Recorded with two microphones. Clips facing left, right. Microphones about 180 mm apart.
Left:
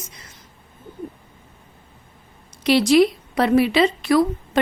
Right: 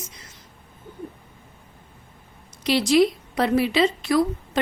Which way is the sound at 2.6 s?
65° left (ahead or behind).